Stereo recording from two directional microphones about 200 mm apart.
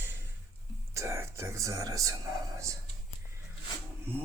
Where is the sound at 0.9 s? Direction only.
15° right (ahead or behind).